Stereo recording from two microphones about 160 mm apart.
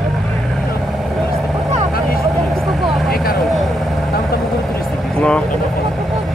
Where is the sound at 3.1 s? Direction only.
65° left (ahead or behind).